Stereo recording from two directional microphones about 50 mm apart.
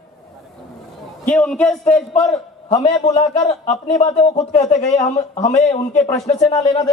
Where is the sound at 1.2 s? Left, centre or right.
Centre.